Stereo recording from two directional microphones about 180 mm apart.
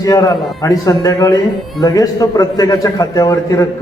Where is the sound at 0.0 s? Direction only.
20° left (ahead or behind).